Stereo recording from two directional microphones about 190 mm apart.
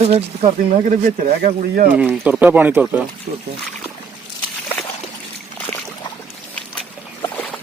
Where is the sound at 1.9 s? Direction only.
5° right (ahead or behind).